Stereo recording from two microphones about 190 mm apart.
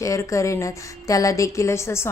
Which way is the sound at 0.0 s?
15° left (ahead or behind).